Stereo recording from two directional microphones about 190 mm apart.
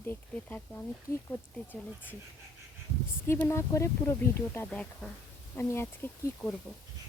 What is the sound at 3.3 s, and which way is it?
Speech, 15° left (ahead or behind).